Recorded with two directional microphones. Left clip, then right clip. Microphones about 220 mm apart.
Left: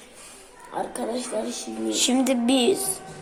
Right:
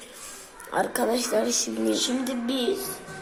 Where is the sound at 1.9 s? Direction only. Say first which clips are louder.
Left 5 dB; 50° left (ahead or behind).